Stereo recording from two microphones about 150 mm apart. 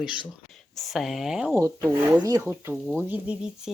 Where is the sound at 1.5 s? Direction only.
20° right (ahead or behind).